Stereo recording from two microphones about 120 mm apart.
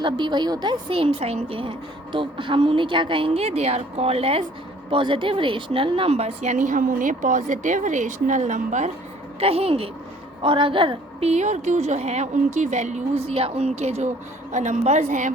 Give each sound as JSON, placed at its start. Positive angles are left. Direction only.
{"t": 0.0, "sound": "a woman's voice", "side_deg": -40}
{"t": 9.4, "sound": "a woman's voice", "side_deg": -55}
{"t": 11.3, "sound": "a woman's voice", "side_deg": -75}
{"t": 14.5, "sound": "a woman's voice", "side_deg": -90}